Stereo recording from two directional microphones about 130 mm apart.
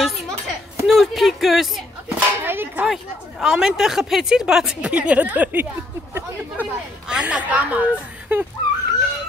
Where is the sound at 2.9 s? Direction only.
5° right (ahead or behind).